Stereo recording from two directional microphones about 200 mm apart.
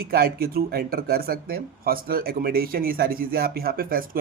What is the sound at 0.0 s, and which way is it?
A man's voice, 50° right (ahead or behind).